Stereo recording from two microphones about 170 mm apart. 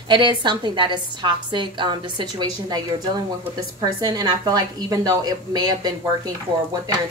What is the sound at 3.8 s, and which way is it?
A woman's voice, 20° right (ahead or behind).